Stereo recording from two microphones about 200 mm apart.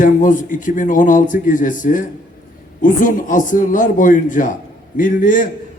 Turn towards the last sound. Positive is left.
turn(degrees=45)  # may be behind; listen again after turning